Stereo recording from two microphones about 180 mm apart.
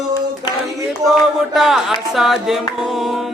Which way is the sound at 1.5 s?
Centre (ahead or behind).